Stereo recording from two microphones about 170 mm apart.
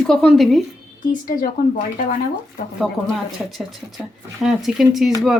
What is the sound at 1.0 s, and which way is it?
Speech, 55° left (ahead or behind).